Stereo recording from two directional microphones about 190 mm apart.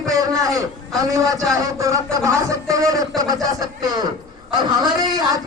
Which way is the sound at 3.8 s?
20° right (ahead or behind).